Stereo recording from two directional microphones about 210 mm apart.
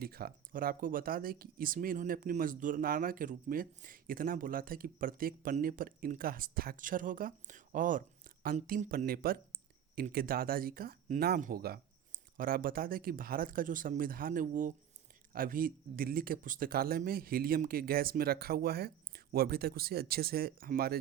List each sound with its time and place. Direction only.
0.0 s speech: 45° right (ahead or behind)